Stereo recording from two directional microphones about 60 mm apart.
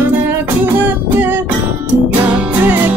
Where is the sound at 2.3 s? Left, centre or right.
Right.